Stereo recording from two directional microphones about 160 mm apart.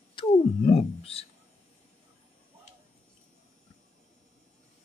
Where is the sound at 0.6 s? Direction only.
40° left (ahead or behind).